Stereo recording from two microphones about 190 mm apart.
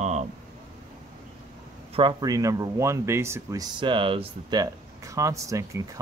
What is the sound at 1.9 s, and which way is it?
Speech, 20° right (ahead or behind).